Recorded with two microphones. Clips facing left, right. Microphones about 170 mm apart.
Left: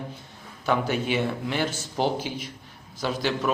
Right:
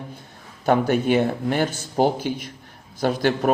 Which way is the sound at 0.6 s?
50° right (ahead or behind).